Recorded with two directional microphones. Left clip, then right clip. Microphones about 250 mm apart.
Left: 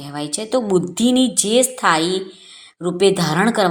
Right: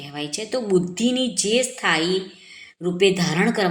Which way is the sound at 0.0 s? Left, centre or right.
Centre.